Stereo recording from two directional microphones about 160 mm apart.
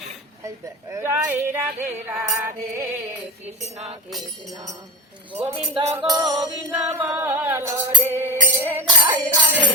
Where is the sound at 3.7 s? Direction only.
40° right (ahead or behind).